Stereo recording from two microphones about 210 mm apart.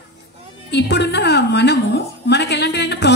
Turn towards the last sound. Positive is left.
turn(degrees=55)  # may be behind; listen again after turning